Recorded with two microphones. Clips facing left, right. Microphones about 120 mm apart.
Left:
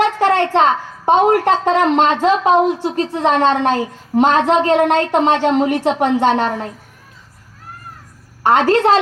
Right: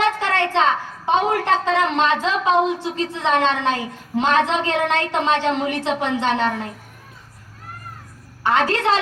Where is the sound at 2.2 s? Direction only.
50° left (ahead or behind).